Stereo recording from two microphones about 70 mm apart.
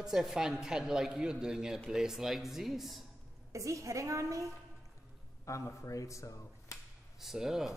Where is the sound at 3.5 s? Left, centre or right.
Right.